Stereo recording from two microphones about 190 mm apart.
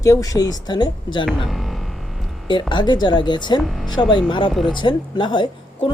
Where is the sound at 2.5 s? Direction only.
25° left (ahead or behind).